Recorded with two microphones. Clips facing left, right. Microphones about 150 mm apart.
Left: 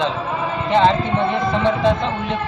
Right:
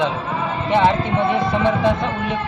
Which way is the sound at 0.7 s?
10° right (ahead or behind).